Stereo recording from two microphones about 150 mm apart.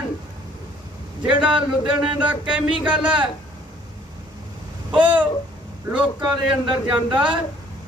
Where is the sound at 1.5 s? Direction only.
35° right (ahead or behind).